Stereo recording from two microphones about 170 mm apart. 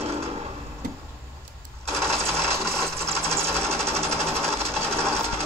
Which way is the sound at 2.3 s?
Centre (ahead or behind).